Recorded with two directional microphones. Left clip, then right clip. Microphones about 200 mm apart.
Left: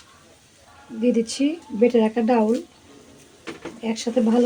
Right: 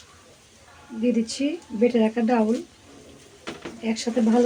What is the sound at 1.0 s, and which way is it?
Speech, 30° left (ahead or behind).